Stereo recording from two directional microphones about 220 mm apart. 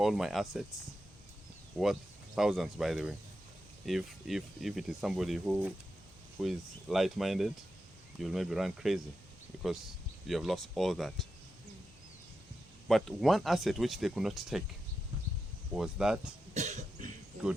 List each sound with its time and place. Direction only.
0.0 s speech: centre (ahead or behind)
1.8 s speech: centre (ahead or behind)
12.9 s speech: centre (ahead or behind)
15.7 s speech: 5° right (ahead or behind)
16.6 s cough: 35° right (ahead or behind)